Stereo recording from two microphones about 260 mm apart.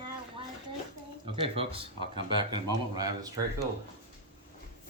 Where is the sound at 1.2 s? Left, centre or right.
Right.